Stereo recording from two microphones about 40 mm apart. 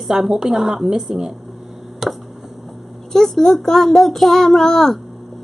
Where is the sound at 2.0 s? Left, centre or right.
Centre.